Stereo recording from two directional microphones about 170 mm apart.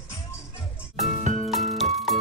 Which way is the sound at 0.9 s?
Centre (ahead or behind).